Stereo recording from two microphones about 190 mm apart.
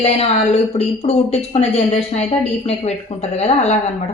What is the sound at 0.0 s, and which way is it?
A woman's voice, 35° left (ahead or behind).